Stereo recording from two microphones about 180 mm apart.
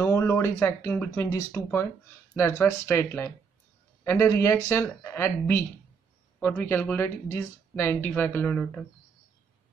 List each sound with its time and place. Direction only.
0.0 s speech: 15° left (ahead or behind)